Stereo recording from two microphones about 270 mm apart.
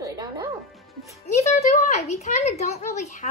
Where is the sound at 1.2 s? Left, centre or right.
Left.